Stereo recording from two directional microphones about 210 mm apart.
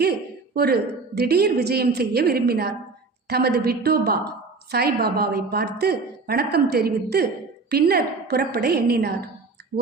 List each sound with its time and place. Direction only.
0.0 s a woman's voice: 50° right (ahead or behind)